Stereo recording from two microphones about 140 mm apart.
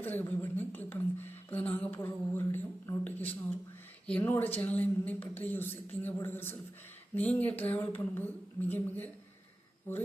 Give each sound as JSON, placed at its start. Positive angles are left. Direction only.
{"t": 0.0, "sound": "a woman's voice", "side_deg": 15}